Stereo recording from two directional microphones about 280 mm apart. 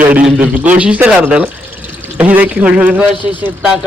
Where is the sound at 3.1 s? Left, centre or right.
Centre.